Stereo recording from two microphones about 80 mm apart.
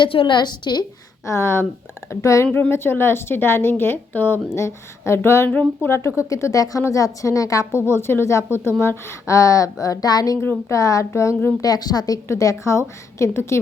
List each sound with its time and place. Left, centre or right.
0.0 s a woman's voice: left
1.2 s a woman's voice: left
2.5 s a woman's voice: left
4.5 s a woman's voice: left
5.5 s a woman's voice: centre
5.9 s a woman's voice: left
11.6 s a woman's voice: left
12.3 s a woman's voice: left